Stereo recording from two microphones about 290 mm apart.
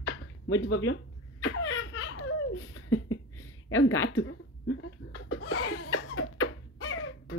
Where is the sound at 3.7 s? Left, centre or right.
Left.